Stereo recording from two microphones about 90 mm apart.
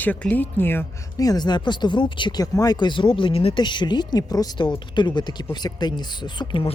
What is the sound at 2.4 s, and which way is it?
Speech, 40° left (ahead or behind).